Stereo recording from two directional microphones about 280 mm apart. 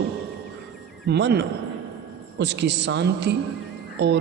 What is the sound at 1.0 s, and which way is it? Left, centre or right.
A man's voice, right.